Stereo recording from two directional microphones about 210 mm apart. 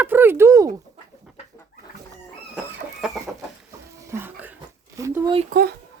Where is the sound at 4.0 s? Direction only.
10° right (ahead or behind).